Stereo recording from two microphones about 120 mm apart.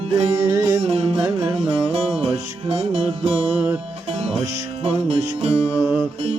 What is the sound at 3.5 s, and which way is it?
Music, 10° right (ahead or behind).